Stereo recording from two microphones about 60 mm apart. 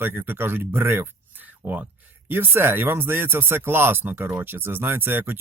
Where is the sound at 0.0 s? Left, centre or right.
Right.